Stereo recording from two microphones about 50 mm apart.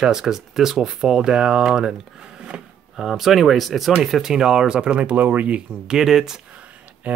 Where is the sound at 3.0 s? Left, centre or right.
Centre; by 5.5 s right.